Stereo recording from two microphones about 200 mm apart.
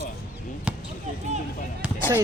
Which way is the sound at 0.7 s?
5° right (ahead or behind).